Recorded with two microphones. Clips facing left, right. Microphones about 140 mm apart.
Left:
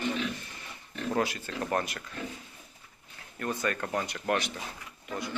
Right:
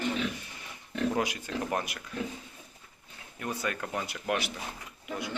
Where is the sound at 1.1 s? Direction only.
15° right (ahead or behind).